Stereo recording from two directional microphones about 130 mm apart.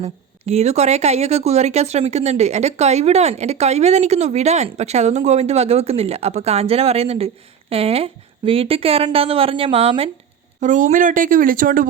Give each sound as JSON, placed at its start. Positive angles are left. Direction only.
{"t": 0.0, "sound": "a woman's voice", "side_deg": -55}
{"t": 10.6, "sound": "speech", "side_deg": -70}